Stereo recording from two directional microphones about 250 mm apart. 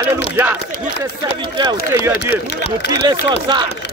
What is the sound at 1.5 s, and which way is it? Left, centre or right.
Speech, centre.